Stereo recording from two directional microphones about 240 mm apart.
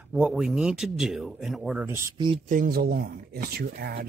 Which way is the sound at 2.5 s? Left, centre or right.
Right.